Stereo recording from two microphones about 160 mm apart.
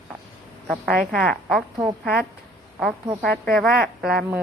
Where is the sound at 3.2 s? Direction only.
Centre (ahead or behind).